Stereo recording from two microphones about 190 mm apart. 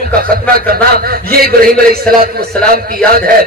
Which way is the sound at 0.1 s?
50° right (ahead or behind).